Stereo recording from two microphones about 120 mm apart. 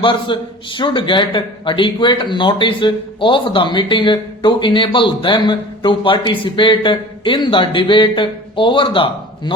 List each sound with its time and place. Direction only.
0.0 s speech: 45° left (ahead or behind)